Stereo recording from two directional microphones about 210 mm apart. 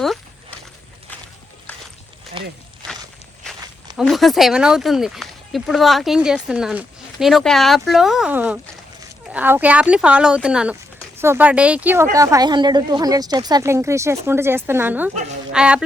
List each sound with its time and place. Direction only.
2.4 s speech: 25° right (ahead or behind)
3.9 s speech: centre (ahead or behind)